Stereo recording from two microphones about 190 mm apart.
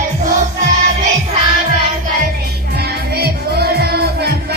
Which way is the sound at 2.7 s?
55° right (ahead or behind).